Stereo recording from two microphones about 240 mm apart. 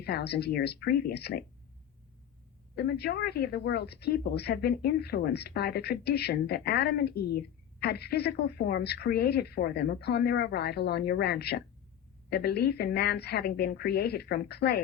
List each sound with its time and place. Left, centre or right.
0.0 s speech: left
2.7 s a woman's voice: left